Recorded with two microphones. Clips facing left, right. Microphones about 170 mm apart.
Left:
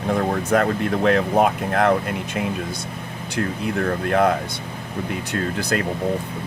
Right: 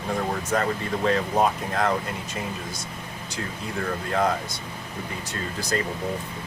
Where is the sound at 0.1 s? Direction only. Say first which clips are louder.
Left 6 dB; 60° left (ahead or behind).